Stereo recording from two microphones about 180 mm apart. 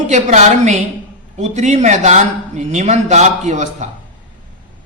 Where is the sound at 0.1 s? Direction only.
40° right (ahead or behind).